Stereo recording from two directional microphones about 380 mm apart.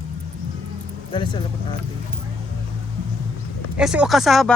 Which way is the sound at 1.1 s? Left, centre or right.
Centre.